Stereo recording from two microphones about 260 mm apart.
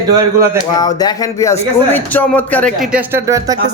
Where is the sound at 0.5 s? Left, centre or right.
Centre.